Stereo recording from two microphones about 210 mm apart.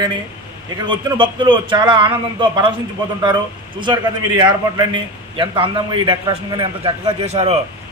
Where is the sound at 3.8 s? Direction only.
20° right (ahead or behind).